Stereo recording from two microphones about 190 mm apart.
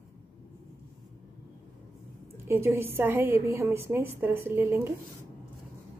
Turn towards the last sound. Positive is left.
turn(degrees=-10)  # may be behind; listen again after turning